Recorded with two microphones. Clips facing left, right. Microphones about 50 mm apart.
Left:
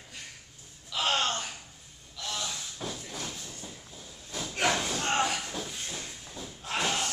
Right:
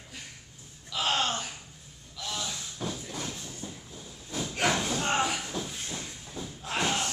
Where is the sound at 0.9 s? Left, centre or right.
Centre.